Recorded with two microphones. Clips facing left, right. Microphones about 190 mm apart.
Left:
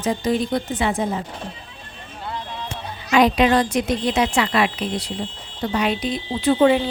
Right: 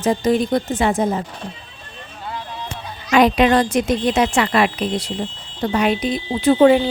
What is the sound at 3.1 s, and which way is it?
Speech, 60° right (ahead or behind).